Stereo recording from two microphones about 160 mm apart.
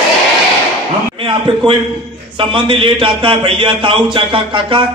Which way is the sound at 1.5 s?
30° right (ahead or behind).